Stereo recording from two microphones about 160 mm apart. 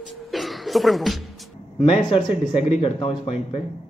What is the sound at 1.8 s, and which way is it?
Speech, 35° left (ahead or behind).